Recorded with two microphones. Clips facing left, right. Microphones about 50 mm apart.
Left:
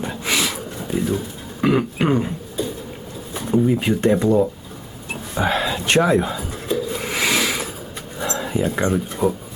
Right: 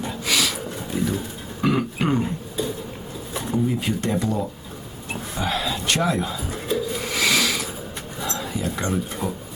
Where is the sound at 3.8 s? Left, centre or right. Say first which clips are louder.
Left 7 dB; left.